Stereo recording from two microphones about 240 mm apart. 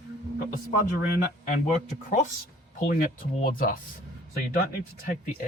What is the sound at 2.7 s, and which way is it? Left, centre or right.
Speech, left.